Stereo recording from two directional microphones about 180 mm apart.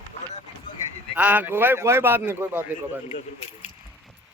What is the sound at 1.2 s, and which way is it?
Speech, 10° right (ahead or behind).